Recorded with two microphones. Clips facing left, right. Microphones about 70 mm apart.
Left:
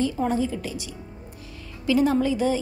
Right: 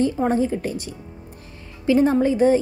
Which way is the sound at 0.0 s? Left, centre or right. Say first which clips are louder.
Right 4 dB; right.